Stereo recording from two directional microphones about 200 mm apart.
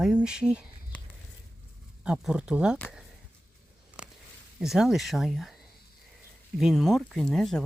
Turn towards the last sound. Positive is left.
turn(degrees=0)  # may be behind; listen again after turning